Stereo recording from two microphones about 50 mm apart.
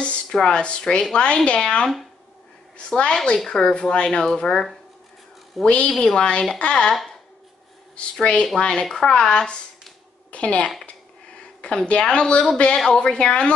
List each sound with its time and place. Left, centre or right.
0.0 s a sound: left
0.5 s a woman's voice: left
3.4 s speech: centre
5.7 s a woman's voice: centre
10.9 s a sound: centre
12.7 s speech: centre